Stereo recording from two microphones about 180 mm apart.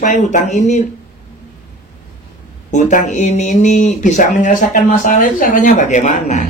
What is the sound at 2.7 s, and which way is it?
Speech, 45° left (ahead or behind).